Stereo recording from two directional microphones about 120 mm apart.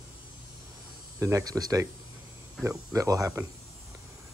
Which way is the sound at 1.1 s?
25° right (ahead or behind).